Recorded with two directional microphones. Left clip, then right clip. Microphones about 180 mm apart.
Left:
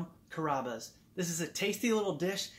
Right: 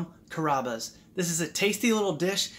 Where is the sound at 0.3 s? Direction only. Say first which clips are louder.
Right 7 dB; 10° right (ahead or behind).